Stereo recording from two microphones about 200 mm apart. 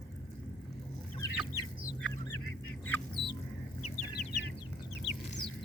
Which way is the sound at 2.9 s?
Centre (ahead or behind).